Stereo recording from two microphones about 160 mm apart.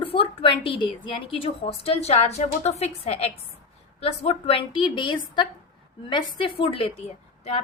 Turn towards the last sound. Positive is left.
turn(degrees=40)  # may be behind; listen again after turning